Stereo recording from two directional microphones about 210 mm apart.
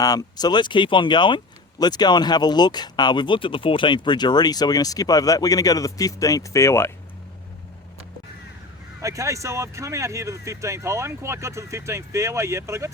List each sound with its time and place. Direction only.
0.0 s speech: 20° left (ahead or behind)
9.0 s speech: 15° right (ahead or behind)